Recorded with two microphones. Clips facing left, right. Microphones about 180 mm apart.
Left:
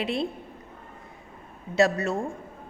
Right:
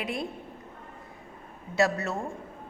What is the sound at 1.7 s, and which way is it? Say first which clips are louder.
Speech: left 4 dB; 20° left (ahead or behind).